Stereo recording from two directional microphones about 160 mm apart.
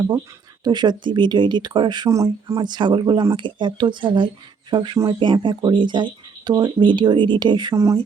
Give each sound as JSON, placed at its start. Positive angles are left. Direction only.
{"t": 0.6, "sound": "speech", "side_deg": -25}